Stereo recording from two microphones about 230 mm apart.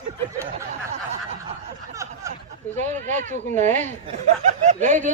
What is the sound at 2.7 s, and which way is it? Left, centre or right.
Speech, right.